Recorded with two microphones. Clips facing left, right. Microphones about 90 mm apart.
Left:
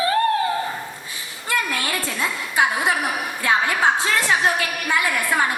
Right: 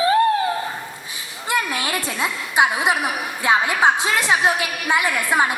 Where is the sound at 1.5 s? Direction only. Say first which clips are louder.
Right 1 dB; 20° right (ahead or behind).